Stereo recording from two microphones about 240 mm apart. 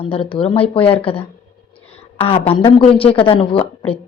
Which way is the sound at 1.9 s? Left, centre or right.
Left.